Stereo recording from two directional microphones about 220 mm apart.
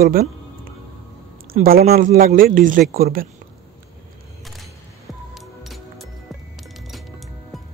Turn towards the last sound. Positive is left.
turn(degrees=0)  # may be behind; listen again after turning